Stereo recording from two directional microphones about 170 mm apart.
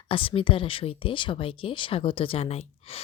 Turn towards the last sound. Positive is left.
turn(degrees=35)  # may be behind; listen again after turning